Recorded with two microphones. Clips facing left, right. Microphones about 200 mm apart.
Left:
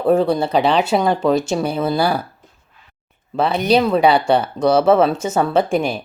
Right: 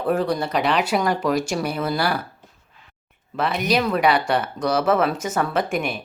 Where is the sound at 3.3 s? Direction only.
30° left (ahead or behind).